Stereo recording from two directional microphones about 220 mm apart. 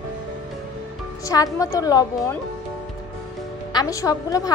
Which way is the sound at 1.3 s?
15° left (ahead or behind).